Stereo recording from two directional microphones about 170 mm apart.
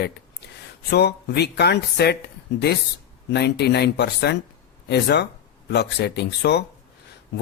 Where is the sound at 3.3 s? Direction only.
75° left (ahead or behind).